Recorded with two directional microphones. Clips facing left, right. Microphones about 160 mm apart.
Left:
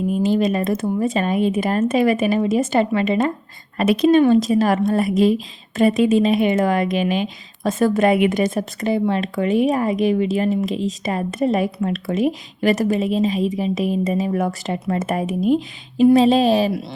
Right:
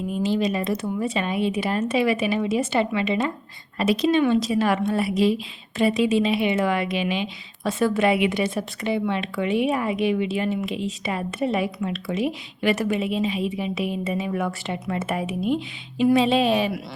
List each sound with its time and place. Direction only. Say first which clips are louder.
0.1 s a woman's voice: left 4 dB; 50° left (ahead or behind)